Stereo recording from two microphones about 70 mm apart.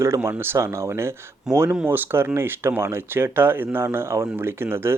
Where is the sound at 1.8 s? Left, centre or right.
Right.